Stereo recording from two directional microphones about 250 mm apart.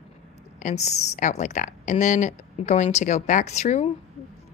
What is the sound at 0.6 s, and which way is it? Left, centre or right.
A woman's voice, left.